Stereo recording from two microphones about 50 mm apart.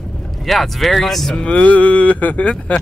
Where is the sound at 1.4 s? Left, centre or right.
Left.